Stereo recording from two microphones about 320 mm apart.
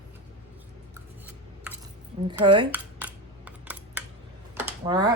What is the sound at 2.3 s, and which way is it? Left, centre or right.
Computer keyboard, centre.